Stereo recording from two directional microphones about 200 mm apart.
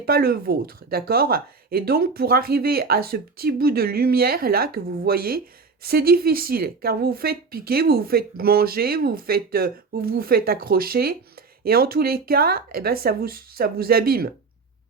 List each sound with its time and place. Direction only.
0.0 s a woman's voice: 50° right (ahead or behind)